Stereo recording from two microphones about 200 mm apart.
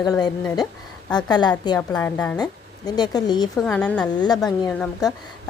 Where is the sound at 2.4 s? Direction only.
20° left (ahead or behind).